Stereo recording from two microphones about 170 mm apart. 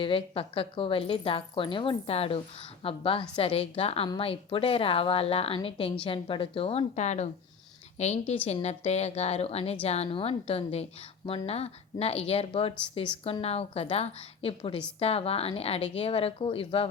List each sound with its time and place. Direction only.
0.0 s a woman's voice: 30° left (ahead or behind)